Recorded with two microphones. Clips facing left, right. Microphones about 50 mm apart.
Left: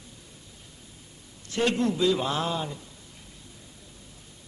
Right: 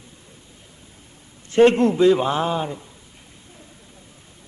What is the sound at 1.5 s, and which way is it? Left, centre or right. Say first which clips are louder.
A man's voice: right 11 dB; right.